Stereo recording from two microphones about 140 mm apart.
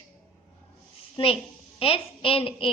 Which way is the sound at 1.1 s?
45° left (ahead or behind).